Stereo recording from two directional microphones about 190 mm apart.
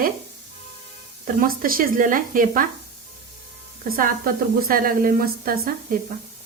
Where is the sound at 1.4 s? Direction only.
50° right (ahead or behind).